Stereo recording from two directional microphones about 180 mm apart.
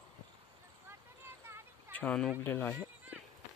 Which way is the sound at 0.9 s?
15° right (ahead or behind).